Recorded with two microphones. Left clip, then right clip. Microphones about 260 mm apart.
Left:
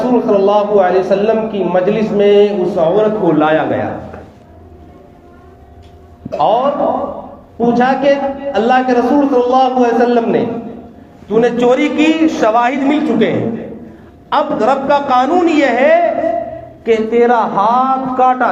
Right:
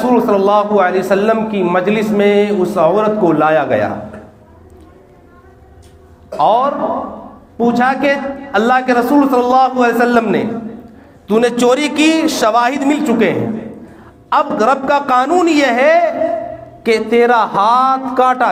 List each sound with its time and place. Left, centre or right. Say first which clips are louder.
0.3 s a man's voice: left 1 dB; right
6.3 s a man's voice: even; right
11.3 s a man's voice: left 1 dB; right